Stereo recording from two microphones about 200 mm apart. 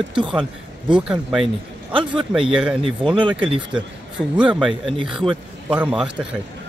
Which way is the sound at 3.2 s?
25° right (ahead or behind).